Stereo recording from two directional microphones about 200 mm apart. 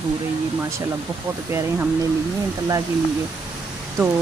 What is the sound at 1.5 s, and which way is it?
Speech, 15° right (ahead or behind).